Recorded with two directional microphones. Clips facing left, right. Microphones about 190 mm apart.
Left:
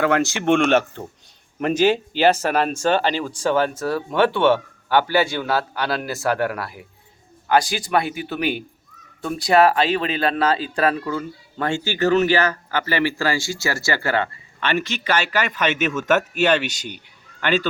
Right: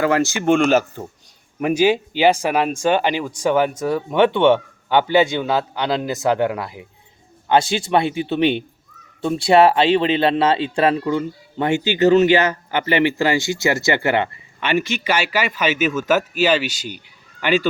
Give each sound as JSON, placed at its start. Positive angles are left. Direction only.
{"t": 0.0, "sound": "speech", "side_deg": 0}